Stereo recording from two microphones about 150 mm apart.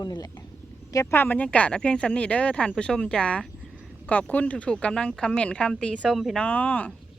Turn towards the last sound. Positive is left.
turn(degrees=10)  # may be behind; listen again after turning